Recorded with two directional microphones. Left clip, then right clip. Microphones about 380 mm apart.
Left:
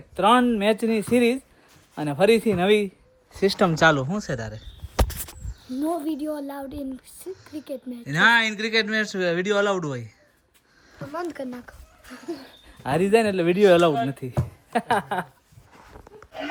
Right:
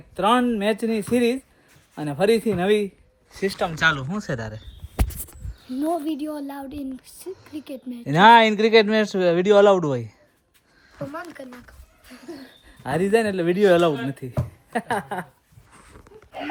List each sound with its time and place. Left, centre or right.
0.2 s speech: centre
3.4 s speech: left
3.8 s speech: centre
5.6 s speech: centre
11.3 s a sound: left
12.6 s speech: centre